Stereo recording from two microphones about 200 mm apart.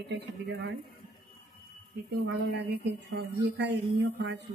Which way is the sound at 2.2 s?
55° right (ahead or behind).